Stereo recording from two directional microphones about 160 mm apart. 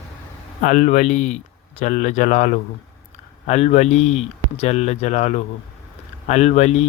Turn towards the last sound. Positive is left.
turn(degrees=40)  # may be behind; listen again after turning